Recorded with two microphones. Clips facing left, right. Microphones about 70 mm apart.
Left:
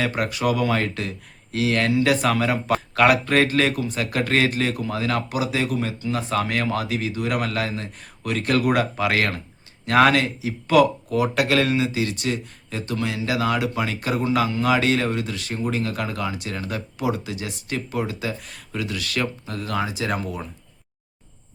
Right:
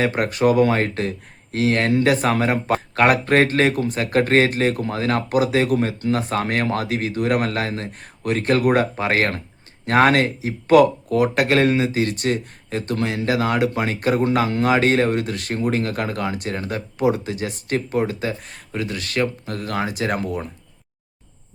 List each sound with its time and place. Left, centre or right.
0.0 s speech: right